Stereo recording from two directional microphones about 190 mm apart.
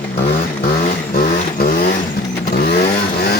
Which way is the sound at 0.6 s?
45° left (ahead or behind).